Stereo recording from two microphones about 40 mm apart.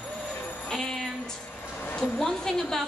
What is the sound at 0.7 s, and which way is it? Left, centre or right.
Music, centre.